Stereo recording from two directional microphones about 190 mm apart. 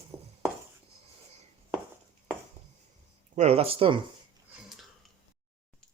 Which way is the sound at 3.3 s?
35° right (ahead or behind).